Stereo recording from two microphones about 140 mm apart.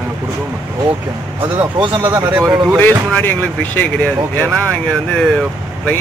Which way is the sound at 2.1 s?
15° right (ahead or behind).